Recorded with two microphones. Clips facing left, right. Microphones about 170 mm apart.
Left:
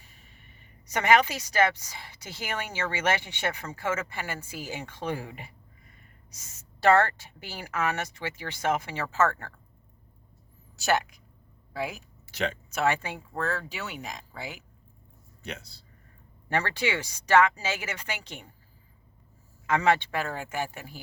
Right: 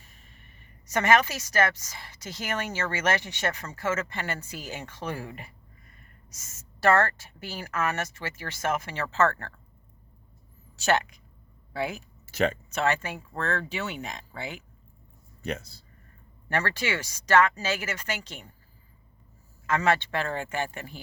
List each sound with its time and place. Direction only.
0.9 s a woman's voice: 15° left (ahead or behind)
10.8 s speech: 5° left (ahead or behind)
12.3 s speech: 45° right (ahead or behind)
12.7 s a woman's voice: 10° left (ahead or behind)
13.4 s speech: 5° left (ahead or behind)
15.4 s speech: 45° right (ahead or behind)
16.5 s a woman's voice: 15° left (ahead or behind)
19.6 s a woman's voice: 15° left (ahead or behind)